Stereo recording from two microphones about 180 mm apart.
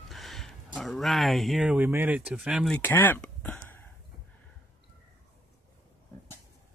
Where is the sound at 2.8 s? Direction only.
10° left (ahead or behind).